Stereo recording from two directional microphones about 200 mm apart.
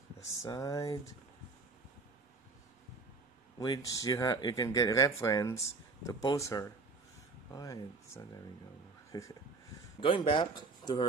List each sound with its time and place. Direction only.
0.4 s speech: 15° left (ahead or behind)
3.5 s speech: 20° left (ahead or behind)